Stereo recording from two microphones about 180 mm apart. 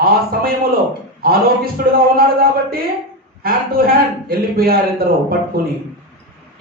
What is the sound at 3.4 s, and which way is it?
A man's voice, 55° right (ahead or behind).